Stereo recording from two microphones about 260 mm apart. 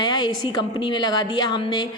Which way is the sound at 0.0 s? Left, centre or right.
Centre.